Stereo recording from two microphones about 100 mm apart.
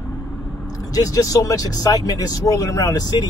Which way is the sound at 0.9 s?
35° left (ahead or behind).